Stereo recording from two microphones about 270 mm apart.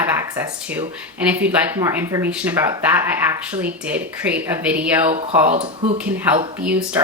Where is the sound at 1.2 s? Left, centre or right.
Centre.